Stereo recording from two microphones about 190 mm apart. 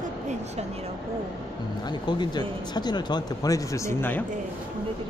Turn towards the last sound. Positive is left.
turn(degrees=15)  # may be behind; listen again after turning